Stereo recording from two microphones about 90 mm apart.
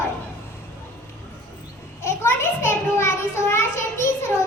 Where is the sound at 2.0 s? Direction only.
30° left (ahead or behind).